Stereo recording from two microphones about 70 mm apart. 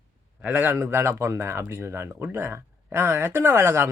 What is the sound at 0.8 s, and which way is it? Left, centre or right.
Speech, right.